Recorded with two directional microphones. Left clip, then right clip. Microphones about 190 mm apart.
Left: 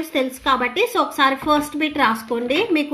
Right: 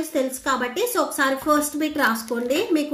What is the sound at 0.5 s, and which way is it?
A woman's voice, 30° left (ahead or behind).